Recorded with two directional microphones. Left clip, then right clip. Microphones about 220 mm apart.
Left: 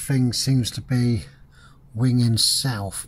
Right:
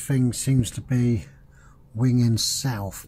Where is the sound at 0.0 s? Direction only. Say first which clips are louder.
Left 2 dB; 15° left (ahead or behind).